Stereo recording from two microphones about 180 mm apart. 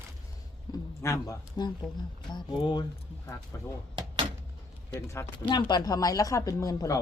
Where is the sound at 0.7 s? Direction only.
15° left (ahead or behind).